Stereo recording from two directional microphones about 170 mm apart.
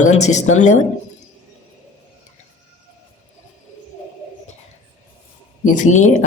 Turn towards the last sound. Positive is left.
turn(degrees=45)  # may be behind; listen again after turning